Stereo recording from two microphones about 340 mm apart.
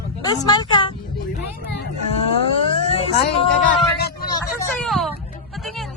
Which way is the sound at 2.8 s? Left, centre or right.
Centre.